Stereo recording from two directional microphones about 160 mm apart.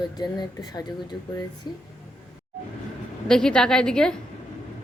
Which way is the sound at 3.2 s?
5° left (ahead or behind).